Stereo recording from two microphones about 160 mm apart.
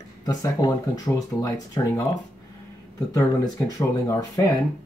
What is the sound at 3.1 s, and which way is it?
Speech, 20° left (ahead or behind).